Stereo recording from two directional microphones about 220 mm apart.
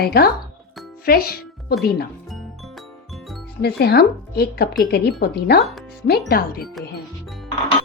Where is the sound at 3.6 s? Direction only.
45° left (ahead or behind).